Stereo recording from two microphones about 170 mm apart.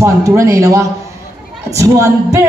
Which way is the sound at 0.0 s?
15° right (ahead or behind).